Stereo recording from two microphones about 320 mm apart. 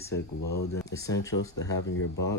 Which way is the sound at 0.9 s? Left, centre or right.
Centre.